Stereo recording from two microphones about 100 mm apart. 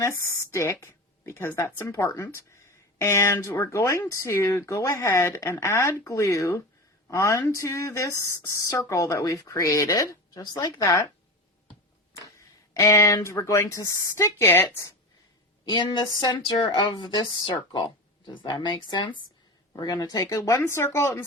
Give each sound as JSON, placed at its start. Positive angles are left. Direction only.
{"t": 0.0, "sound": "speech", "side_deg": 30}
{"t": 2.0, "sound": "speech", "side_deg": 40}
{"t": 2.3, "sound": "speech", "side_deg": 25}
{"t": 12.2, "sound": "speech", "side_deg": 30}
{"t": 15.6, "sound": "speech", "side_deg": 50}